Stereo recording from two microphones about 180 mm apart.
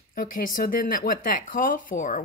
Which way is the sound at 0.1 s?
50° left (ahead or behind).